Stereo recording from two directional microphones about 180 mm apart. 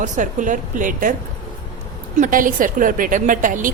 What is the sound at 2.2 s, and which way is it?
Speech, 50° right (ahead or behind).